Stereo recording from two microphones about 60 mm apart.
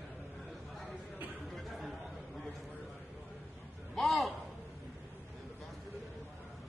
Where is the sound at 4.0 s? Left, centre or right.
Centre.